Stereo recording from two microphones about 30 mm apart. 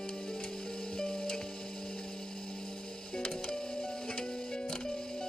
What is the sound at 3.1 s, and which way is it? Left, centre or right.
Music, left.